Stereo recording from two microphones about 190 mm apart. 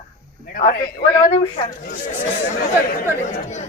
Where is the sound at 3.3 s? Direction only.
40° left (ahead or behind).